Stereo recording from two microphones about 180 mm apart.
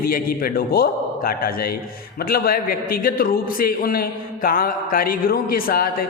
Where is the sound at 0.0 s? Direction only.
55° left (ahead or behind).